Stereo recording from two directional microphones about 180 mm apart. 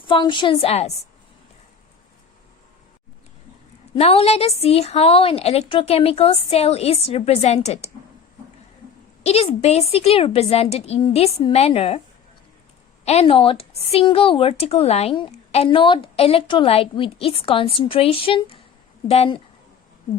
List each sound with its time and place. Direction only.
0.0 s a woman's voice: 25° left (ahead or behind)
3.9 s speech: 35° left (ahead or behind)
9.2 s speech: 35° left (ahead or behind)
13.1 s speech: 35° left (ahead or behind)